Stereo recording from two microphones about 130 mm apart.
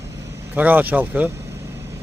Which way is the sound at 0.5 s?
15° right (ahead or behind).